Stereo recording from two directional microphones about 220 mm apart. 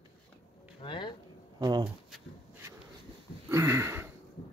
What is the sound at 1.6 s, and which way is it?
Speech, 20° right (ahead or behind).